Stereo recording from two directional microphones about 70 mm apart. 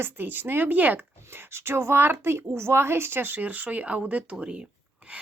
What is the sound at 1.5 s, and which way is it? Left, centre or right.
A woman's voice, right.